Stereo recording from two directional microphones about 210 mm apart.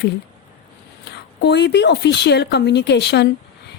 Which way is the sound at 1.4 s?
55° left (ahead or behind).